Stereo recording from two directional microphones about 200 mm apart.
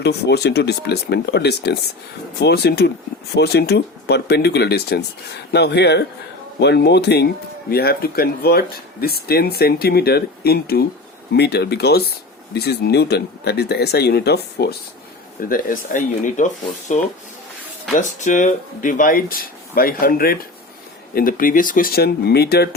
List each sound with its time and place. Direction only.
0.0 s speech: 55° left (ahead or behind); by 16.5 s 40° left (ahead or behind)
17.9 s speech: 40° left (ahead or behind)